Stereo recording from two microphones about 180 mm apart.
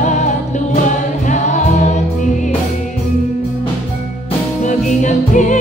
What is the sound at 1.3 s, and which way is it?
Music, 40° left (ahead or behind).